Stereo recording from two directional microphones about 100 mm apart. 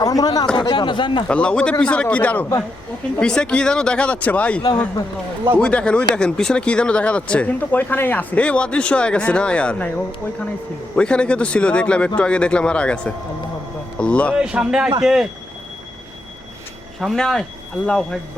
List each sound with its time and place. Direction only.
0.0 s speech: 40° left (ahead or behind)
0.5 s speech: 50° left (ahead or behind)
1.3 s speech: 10° left (ahead or behind)
10.9 s speech: 10° left (ahead or behind)
14.3 s speech: 10° right (ahead or behind)
17.0 s speech: centre (ahead or behind)